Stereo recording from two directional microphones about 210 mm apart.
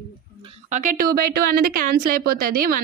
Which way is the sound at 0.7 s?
40° right (ahead or behind).